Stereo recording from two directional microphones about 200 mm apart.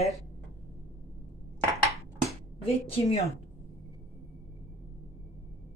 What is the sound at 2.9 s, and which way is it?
Speech, 30° left (ahead or behind).